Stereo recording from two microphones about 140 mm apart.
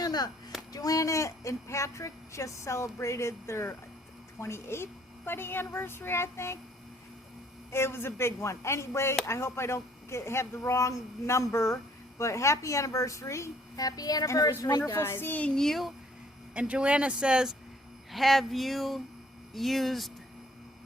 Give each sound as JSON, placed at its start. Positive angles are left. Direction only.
{"t": 0.0, "sound": "a sound", "side_deg": 30}
{"t": 0.7, "sound": "a woman's voice", "side_deg": 25}
{"t": 7.7, "sound": "a woman's voice", "side_deg": 15}